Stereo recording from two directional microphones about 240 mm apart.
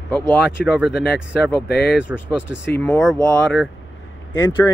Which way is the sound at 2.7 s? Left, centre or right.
Centre.